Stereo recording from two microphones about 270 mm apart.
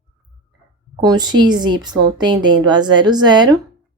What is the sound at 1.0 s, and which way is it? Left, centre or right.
A woman's voice, centre.